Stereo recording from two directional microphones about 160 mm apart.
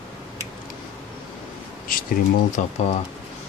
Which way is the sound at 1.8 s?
60° left (ahead or behind).